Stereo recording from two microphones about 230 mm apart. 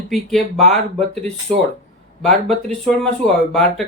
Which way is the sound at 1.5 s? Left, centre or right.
Right.